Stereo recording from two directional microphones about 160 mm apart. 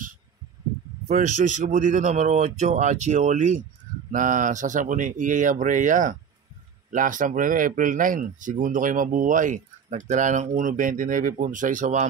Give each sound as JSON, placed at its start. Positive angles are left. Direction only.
{"t": 1.0, "sound": "speech", "side_deg": -50}